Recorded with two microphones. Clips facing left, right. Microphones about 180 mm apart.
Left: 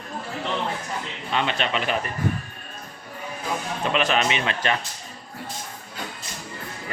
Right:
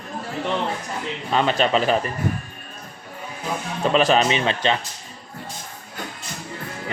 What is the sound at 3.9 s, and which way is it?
Speech, 35° right (ahead or behind).